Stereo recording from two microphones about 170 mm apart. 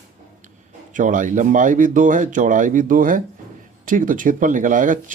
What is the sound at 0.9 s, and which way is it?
Speech, 50° right (ahead or behind).